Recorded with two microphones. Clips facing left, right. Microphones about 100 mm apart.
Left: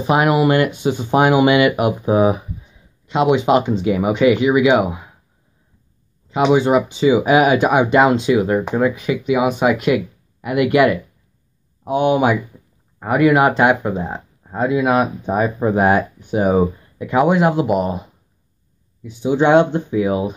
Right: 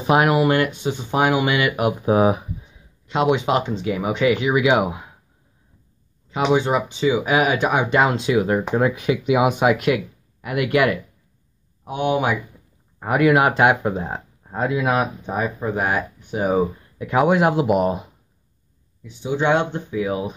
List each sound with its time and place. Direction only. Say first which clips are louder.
0.0 s speech: left 2 dB; centre (ahead or behind)
6.5 s speech: left 4 dB; 5° left (ahead or behind)
11.8 s speech: left 5 dB; 15° left (ahead or behind)
13.0 s speech: left 3 dB; centre (ahead or behind); by 16.5 s 15° left (ahead or behind)
16.5 s speech: left 4 dB; centre (ahead or behind)
19.0 s speech: left 5 dB; 15° left (ahead or behind)